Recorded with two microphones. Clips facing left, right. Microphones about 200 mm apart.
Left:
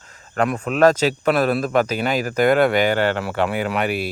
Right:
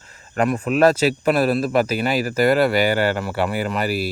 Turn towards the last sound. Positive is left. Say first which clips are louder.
# even
turn(degrees=-5)  # may be behind; listen again after turning